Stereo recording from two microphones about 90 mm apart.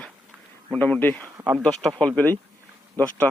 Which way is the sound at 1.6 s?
5° left (ahead or behind).